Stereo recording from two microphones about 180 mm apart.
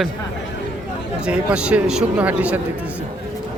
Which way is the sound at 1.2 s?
5° right (ahead or behind).